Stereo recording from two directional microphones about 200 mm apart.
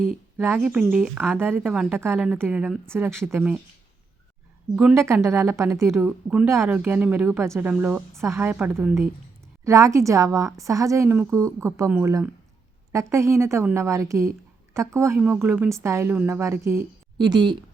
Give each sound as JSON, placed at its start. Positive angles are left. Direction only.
{"t": 0.3, "sound": "a woman's voice", "side_deg": -5}
{"t": 4.7, "sound": "a woman's voice", "side_deg": -10}